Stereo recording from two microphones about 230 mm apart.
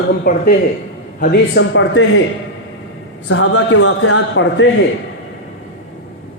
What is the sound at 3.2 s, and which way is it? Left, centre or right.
A man's voice, left.